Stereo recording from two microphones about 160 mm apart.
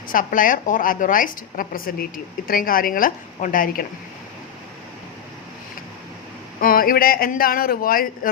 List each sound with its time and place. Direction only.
0.1 s a woman's voice: 60° left (ahead or behind)
6.6 s a woman's voice: 65° left (ahead or behind)